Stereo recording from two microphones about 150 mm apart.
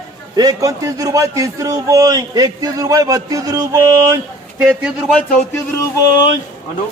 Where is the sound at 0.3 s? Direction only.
25° right (ahead or behind).